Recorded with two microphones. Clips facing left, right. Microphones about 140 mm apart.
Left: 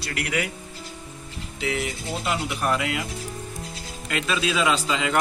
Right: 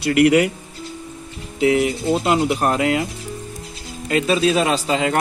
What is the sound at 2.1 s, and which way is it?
Speech, 55° right (ahead or behind).